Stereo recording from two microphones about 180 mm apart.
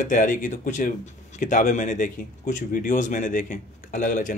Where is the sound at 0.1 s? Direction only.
45° left (ahead or behind).